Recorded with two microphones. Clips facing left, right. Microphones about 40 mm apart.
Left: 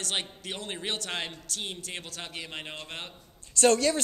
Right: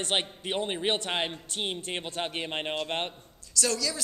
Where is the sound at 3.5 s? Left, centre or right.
Left.